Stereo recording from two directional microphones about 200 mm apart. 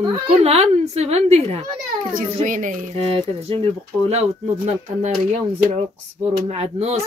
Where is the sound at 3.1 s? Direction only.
30° right (ahead or behind).